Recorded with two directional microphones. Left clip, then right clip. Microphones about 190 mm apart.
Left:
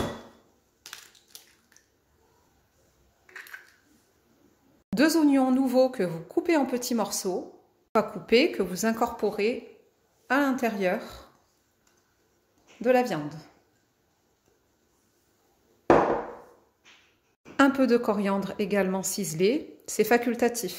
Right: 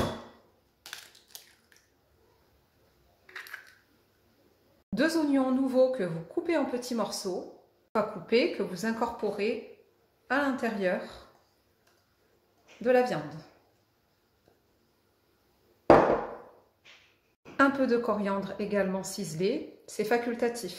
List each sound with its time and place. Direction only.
4.9 s a woman's voice: 50° left (ahead or behind)
12.8 s a woman's voice: 45° left (ahead or behind)
17.6 s a woman's voice: 45° left (ahead or behind)